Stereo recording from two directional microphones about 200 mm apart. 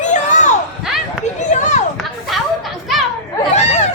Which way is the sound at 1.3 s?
35° left (ahead or behind).